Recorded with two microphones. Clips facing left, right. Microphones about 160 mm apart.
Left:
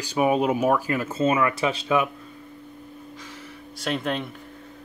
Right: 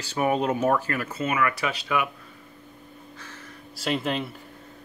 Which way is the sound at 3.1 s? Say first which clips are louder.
Left 4 dB; 15° left (ahead or behind).